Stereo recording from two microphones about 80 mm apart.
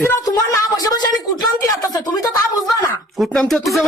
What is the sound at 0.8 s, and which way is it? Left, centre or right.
Speech, left.